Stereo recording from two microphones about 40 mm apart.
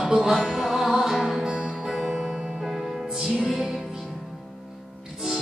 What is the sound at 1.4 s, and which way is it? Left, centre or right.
Music, right.